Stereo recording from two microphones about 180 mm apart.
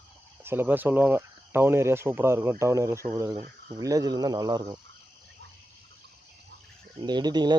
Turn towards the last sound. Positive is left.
turn(degrees=-25)  # may be behind; listen again after turning